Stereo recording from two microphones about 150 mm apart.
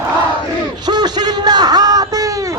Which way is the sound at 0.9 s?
30° right (ahead or behind).